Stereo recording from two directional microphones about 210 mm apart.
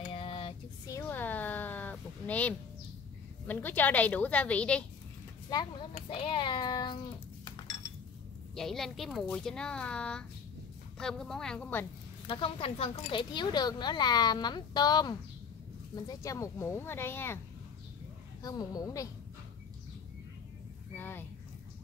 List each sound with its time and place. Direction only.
0.1 s a sound: 25° left (ahead or behind); by 2.5 s 5° left (ahead or behind)
3.4 s speech: 10° left (ahead or behind)
5.5 s speech: 20° left (ahead or behind)
7.4 s chink: 20° left (ahead or behind)
8.5 s speech: centre (ahead or behind)
12.3 s speech: 25° left (ahead or behind)
18.4 s speech: 20° left (ahead or behind)
20.9 s speech: 10° left (ahead or behind)